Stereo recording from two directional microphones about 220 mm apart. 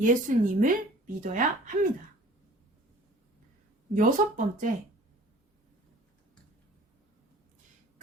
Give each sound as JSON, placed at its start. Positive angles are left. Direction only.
{"t": 0.0, "sound": "a woman's voice", "side_deg": -35}
{"t": 3.9, "sound": "a woman's voice", "side_deg": -40}